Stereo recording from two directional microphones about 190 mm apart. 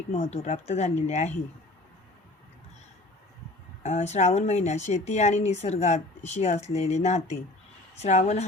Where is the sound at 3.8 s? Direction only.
35° left (ahead or behind).